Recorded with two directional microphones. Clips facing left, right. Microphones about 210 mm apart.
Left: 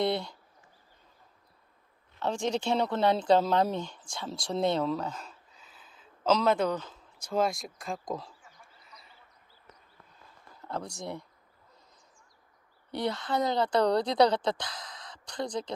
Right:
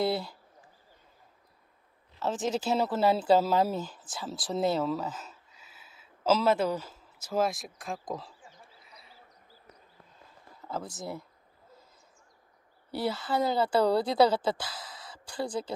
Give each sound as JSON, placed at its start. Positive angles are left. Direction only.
{"t": 0.0, "sound": "speech", "side_deg": -5}
{"t": 2.1, "sound": "speech", "side_deg": -5}
{"t": 10.6, "sound": "speech", "side_deg": -5}
{"t": 12.9, "sound": "a woman's voice", "side_deg": -5}